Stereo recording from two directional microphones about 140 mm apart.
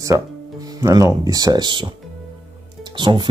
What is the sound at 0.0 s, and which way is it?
Speech, 25° right (ahead or behind).